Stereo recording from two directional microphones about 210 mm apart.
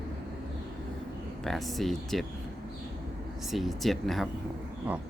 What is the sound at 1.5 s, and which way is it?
Speech, centre (ahead or behind).